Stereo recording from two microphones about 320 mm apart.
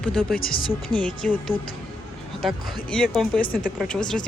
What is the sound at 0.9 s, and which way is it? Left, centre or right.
Speech, centre.